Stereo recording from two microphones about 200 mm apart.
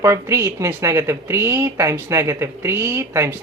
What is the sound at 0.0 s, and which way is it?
Speech, 15° right (ahead or behind).